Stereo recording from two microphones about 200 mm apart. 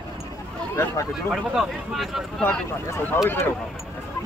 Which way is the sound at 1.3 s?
Centre (ahead or behind).